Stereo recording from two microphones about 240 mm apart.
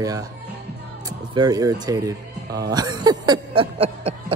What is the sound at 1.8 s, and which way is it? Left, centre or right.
Speech, centre.